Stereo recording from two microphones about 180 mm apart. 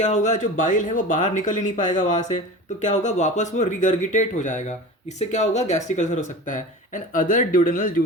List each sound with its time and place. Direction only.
0.0 s speech: 40° left (ahead or behind)